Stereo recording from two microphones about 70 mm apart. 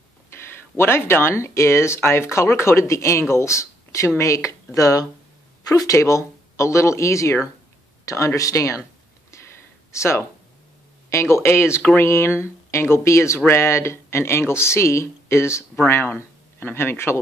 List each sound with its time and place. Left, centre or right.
0.3 s speech: left
5.9 s speech: left
8.0 s a sound: left
8.4 s speech: left
9.9 s speech: left